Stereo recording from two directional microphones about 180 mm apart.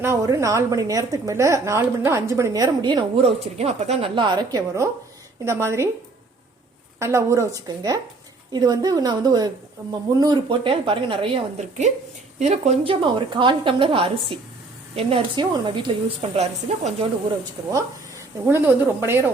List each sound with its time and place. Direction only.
0.0 s a woman's voice: 15° right (ahead or behind)
7.0 s a woman's voice: 15° right (ahead or behind); by 17.1 s 35° right (ahead or behind)
17.6 s a woman's voice: 20° right (ahead or behind)